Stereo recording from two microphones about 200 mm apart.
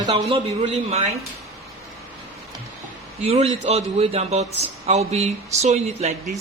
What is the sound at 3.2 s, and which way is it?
A man's voice, 30° right (ahead or behind).